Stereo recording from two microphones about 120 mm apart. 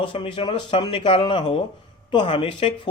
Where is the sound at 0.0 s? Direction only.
45° left (ahead or behind).